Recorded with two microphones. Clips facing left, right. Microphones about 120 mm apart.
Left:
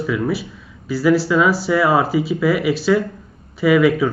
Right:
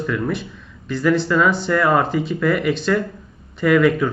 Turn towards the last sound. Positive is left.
turn(degrees=5)  # may be behind; listen again after turning